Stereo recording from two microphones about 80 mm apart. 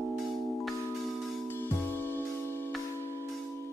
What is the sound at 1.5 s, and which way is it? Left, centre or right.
Music, left.